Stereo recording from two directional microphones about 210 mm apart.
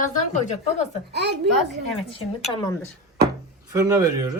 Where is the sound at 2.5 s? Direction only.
20° left (ahead or behind).